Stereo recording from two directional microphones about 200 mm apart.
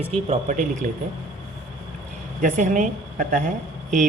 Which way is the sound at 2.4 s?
40° right (ahead or behind).